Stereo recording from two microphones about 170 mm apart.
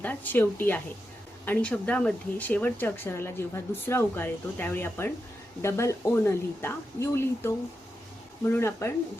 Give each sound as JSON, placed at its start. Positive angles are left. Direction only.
{"t": 0.0, "sound": "a woman's voice", "side_deg": 10}